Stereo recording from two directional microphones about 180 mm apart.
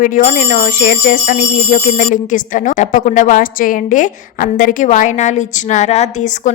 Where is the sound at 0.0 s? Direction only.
40° left (ahead or behind).